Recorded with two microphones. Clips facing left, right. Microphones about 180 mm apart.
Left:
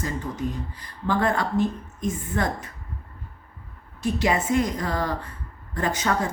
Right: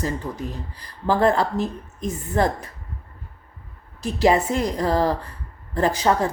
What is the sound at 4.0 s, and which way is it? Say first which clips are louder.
Speech: right 5 dB; 35° right (ahead or behind).